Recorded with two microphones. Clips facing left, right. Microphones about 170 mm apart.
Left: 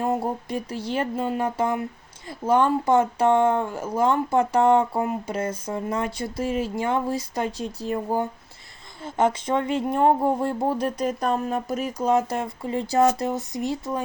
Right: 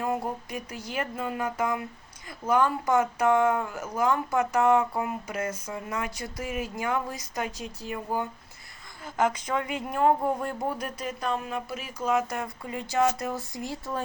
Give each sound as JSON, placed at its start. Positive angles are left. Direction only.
{"t": 0.0, "sound": "speech", "side_deg": 30}